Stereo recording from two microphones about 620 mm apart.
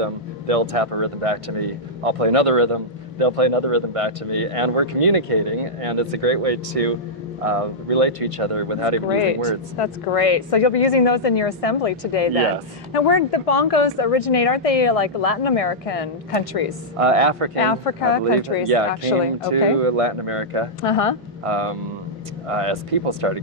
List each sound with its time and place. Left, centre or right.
0.0 s speech: right
9.2 s speech: left
17.0 s speech: right
17.6 s speech: left
19.5 s speech: right
20.8 s speech: left
21.5 s speech: right